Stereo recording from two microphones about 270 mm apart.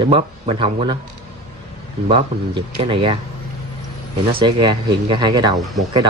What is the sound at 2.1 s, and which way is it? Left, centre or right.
Speech, centre.